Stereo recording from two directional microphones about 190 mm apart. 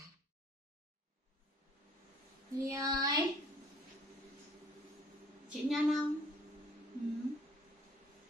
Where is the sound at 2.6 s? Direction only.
15° right (ahead or behind).